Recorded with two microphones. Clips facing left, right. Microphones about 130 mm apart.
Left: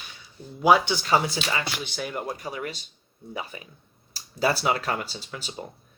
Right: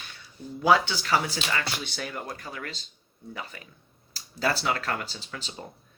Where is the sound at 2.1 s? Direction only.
20° left (ahead or behind).